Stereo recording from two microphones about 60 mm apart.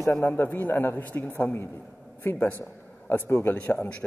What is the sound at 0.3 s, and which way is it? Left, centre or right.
A man's voice, left.